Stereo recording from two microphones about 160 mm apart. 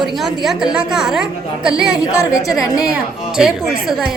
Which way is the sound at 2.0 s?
20° left (ahead or behind).